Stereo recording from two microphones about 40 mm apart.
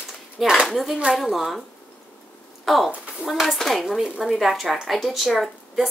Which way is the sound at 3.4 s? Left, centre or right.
Centre.